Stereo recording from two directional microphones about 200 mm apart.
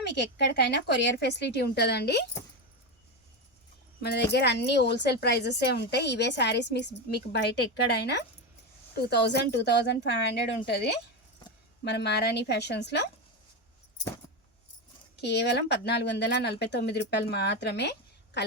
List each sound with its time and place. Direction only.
0.0 s a woman's voice: 60° left (ahead or behind)
4.0 s a woman's voice: 55° left (ahead or behind)
15.1 s a woman's voice: 55° left (ahead or behind)